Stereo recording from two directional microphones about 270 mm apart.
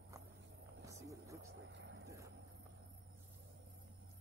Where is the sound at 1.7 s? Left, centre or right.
Right.